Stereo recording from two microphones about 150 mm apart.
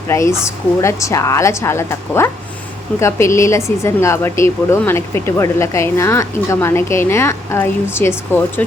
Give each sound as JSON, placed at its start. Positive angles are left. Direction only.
{"t": 0.1, "sound": "a woman's voice", "side_deg": 20}